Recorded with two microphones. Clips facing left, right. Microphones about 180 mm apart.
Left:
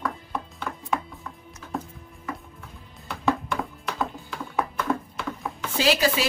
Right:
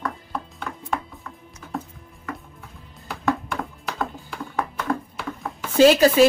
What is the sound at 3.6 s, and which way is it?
Typing, centre (ahead or behind).